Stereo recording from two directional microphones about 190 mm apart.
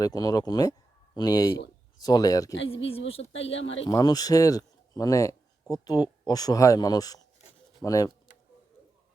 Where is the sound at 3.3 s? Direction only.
80° left.